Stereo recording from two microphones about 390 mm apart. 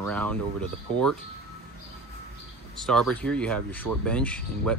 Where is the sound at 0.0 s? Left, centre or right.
Centre.